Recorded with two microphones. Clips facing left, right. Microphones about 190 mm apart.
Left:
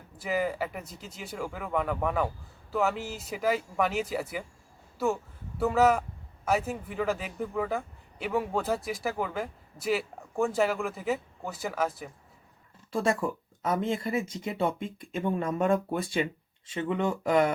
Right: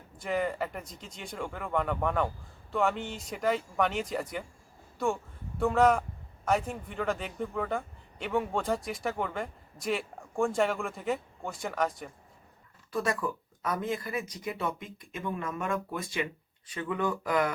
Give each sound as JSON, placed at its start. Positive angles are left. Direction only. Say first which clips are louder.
{"t": 0.2, "sound": "speech", "louder": "left 1 dB", "side_deg": 5}
{"t": 12.9, "sound": "speech", "louder": "left 3 dB", "side_deg": 25}